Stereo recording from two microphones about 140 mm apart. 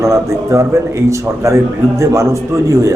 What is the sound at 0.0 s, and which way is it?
A man's voice, 20° right (ahead or behind).